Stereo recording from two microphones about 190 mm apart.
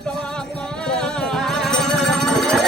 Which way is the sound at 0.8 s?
5° left (ahead or behind).